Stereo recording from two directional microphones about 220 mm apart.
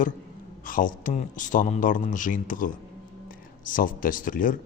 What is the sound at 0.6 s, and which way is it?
Speech, 40° left (ahead or behind).